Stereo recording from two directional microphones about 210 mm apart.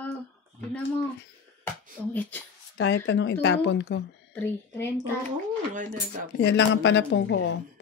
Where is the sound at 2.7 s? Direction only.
60° left (ahead or behind).